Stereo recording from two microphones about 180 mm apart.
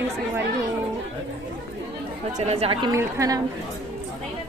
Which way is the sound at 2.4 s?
35° right (ahead or behind).